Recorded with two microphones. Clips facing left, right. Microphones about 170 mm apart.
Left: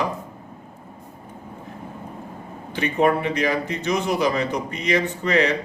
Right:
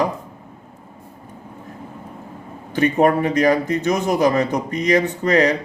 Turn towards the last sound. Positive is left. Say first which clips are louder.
# right 4 dB
turn(degrees=-40)  # may be behind; listen again after turning